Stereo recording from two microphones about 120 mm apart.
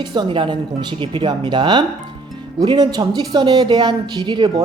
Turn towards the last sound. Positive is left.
turn(degrees=-40)  # may be behind; listen again after turning